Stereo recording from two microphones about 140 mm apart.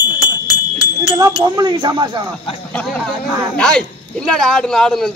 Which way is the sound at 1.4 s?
30° right (ahead or behind).